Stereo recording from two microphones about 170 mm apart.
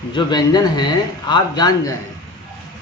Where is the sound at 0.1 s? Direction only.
25° left (ahead or behind).